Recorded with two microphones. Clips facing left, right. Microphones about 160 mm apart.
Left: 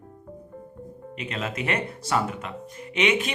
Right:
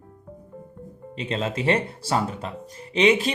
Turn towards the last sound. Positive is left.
turn(degrees=-30)  # may be behind; listen again after turning